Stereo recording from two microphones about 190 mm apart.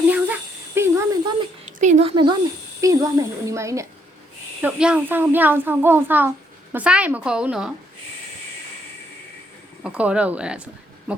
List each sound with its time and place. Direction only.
0.1 s a sound: 10° right (ahead or behind)
1.8 s a woman's voice: 35° right (ahead or behind); by 7.7 s 5° right (ahead or behind)
9.8 s a child's voice: 5° right (ahead or behind)